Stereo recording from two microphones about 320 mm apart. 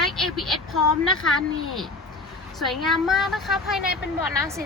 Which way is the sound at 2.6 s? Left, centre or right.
Centre.